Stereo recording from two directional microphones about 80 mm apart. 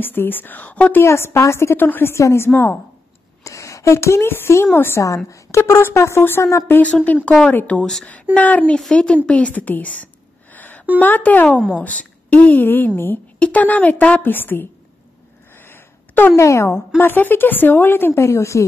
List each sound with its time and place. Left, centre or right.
0.0 s a woman's voice: left
1.0 s speech: left
3.4 s a woman's voice: left
5.0 s a woman's voice: left
6.7 s a woman's voice: centre
10.5 s a sound: left
11.0 s a woman's voice: left
15.5 s a sound: left
16.3 s a woman's voice: left